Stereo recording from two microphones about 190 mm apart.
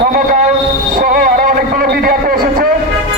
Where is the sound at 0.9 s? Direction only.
45° right (ahead or behind).